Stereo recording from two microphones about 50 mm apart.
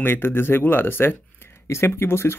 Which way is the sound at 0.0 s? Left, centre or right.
Left.